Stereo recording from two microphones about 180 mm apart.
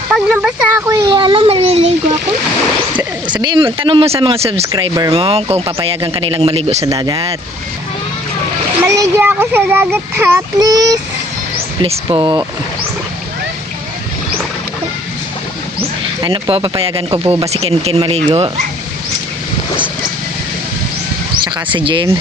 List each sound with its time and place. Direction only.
0.1 s a child's voice: 5° right (ahead or behind)
0.9 s a child's voice: 25° right (ahead or behind)
3.2 s a child's voice: 25° right (ahead or behind)
4.7 s a child's voice: 20° right (ahead or behind)
5.1 s speech: 35° right (ahead or behind)
6.8 s a child's voice: 20° right (ahead or behind)
8.8 s a child's voice: 15° right (ahead or behind)
16.2 s speech: 30° right (ahead or behind)
21.7 s a child's voice: 30° right (ahead or behind)